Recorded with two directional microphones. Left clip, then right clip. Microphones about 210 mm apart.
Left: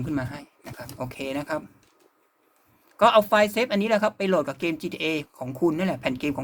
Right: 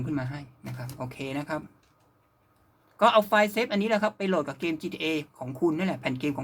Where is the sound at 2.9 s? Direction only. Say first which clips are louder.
Left 3 dB; 30° left (ahead or behind).